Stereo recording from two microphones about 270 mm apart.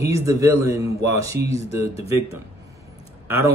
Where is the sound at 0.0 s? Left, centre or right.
Centre.